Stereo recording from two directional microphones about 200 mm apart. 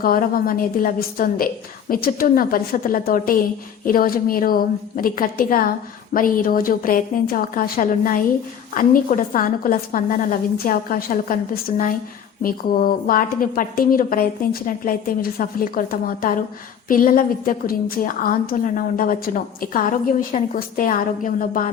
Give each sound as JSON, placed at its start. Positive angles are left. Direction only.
{"t": 0.0, "sound": "a woman's voice", "side_deg": 45}
{"t": 12.4, "sound": "a woman's voice", "side_deg": 45}